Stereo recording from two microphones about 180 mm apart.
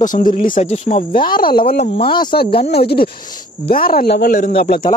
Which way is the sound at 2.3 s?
60° left (ahead or behind).